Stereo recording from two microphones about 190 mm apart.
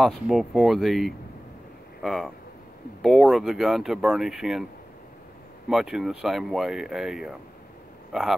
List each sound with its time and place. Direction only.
0.0 s speech: centre (ahead or behind)
5.7 s speech: centre (ahead or behind)